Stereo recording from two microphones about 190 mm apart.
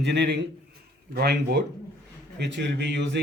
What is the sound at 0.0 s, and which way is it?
A man's voice, 65° right (ahead or behind).